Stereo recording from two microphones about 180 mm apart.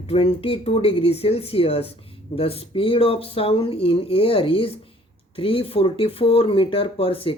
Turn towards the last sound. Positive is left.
turn(degrees=30)  # may be behind; listen again after turning